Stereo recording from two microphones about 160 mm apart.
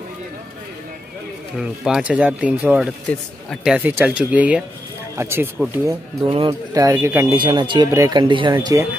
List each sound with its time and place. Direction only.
1.6 s speech: 5° right (ahead or behind)
6.2 s speech: 35° right (ahead or behind)
6.7 s speech: 20° right (ahead or behind)
7.3 s speech: 30° right (ahead or behind)